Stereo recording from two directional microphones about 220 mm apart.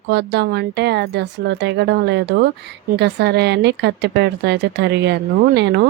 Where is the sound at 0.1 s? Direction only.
50° right (ahead or behind).